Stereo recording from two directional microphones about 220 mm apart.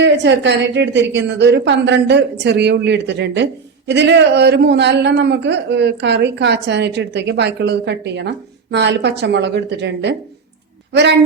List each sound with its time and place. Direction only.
0.0 s a woman's voice: 55° right (ahead or behind)